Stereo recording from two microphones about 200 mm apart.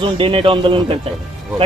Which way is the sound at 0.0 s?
25° right (ahead or behind).